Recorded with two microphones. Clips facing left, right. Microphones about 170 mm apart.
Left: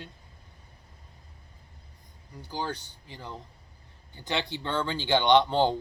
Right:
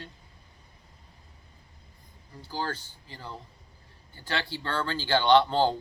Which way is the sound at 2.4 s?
20° left (ahead or behind).